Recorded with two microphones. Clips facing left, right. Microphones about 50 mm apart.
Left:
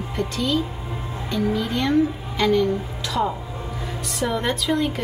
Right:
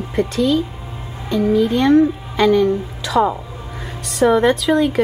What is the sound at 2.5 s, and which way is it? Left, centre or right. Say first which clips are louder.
A woman's voice: right 4 dB; right.